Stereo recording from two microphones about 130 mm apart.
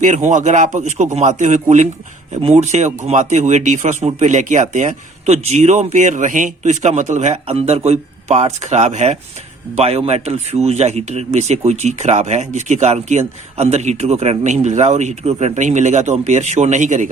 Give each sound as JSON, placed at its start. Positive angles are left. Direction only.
{"t": 0.0, "sound": "a man's voice", "side_deg": -70}
{"t": 2.3, "sound": "a man's voice", "side_deg": -55}